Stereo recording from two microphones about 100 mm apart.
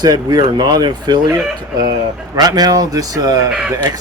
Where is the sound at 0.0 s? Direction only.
40° right (ahead or behind).